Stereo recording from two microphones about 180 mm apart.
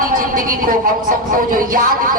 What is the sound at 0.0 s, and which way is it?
A woman's voice, 50° right (ahead or behind).